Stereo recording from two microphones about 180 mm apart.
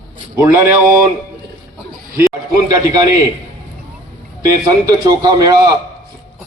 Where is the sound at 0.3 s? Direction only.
15° right (ahead or behind).